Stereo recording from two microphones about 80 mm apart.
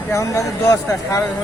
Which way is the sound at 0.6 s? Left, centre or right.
Left.